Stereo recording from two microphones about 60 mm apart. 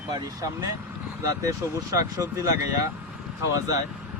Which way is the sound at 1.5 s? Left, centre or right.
Right.